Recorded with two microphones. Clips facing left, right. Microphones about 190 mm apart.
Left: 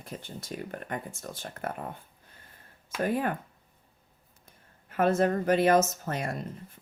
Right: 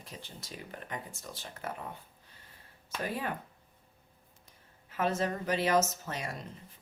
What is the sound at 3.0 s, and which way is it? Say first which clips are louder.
Speech: left 8 dB; 50° left (ahead or behind).